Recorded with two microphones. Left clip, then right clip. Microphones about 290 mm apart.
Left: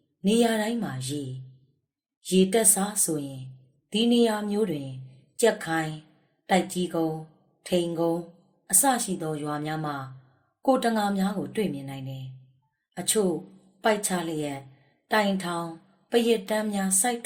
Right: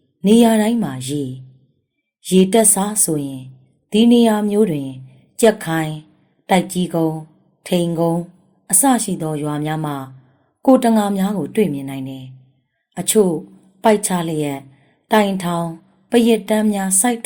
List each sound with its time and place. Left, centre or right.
0.2 s a woman's voice: right
2.2 s a woman's voice: right